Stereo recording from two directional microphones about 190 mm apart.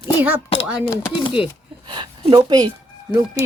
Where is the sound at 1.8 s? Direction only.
25° right (ahead or behind).